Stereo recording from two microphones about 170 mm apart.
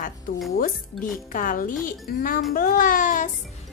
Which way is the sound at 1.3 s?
50° left (ahead or behind).